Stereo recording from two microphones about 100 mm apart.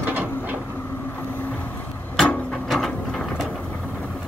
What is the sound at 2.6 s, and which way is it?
Ratchet, centre (ahead or behind).